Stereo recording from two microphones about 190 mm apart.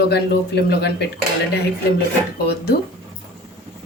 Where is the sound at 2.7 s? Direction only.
55° left (ahead or behind).